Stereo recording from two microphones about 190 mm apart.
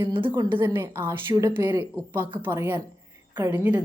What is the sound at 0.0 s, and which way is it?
Speech, 25° right (ahead or behind).